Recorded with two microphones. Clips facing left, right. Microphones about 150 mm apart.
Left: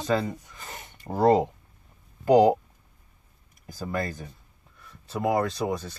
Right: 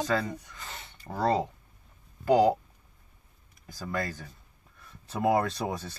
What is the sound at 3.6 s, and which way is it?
Speech, 15° left (ahead or behind).